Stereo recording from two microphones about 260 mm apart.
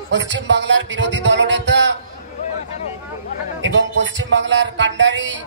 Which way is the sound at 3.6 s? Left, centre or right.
Right.